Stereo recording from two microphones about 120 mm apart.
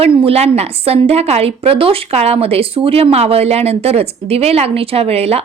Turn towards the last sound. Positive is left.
turn(degrees=-55)  # may be behind; listen again after turning